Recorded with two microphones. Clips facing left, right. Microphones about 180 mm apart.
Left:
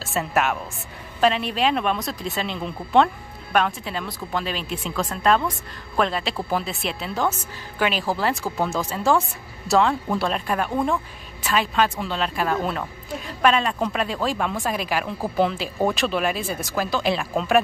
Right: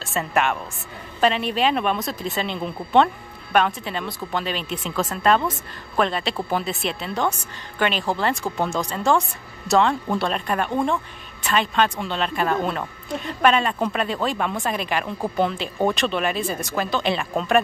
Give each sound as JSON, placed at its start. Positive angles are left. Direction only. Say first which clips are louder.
{"t": 0.0, "sound": "speech", "louder": "even", "side_deg": 0}